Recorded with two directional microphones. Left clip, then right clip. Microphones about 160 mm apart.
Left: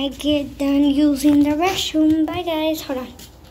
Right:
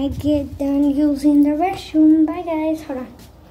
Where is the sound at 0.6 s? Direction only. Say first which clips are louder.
Left 2 dB; 10° right (ahead or behind).